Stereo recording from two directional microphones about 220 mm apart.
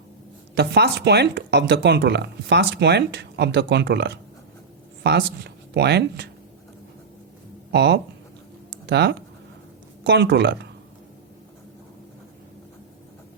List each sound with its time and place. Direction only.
0.5 s speech: 50° right (ahead or behind)
7.7 s speech: 50° right (ahead or behind)